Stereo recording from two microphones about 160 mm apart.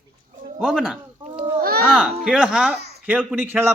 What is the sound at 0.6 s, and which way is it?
A man's voice, 5° right (ahead or behind).